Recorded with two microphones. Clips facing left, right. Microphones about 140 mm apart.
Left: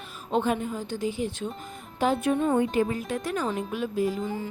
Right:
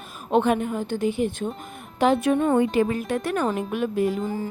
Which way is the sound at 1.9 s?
80° right.